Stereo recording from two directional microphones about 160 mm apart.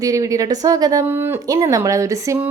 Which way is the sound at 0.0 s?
20° right (ahead or behind).